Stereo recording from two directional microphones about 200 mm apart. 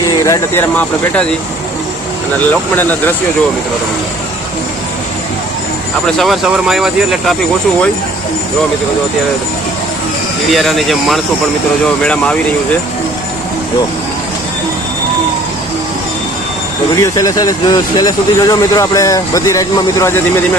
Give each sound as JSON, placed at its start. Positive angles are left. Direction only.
{"t": 0.2, "sound": "speech", "side_deg": 15}
{"t": 2.5, "sound": "speech", "side_deg": 10}
{"t": 6.1, "sound": "speech", "side_deg": 0}
{"t": 10.5, "sound": "speech", "side_deg": 0}
{"t": 17.0, "sound": "speech", "side_deg": 15}